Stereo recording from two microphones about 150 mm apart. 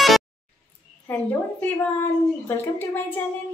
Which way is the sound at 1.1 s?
10° left (ahead or behind).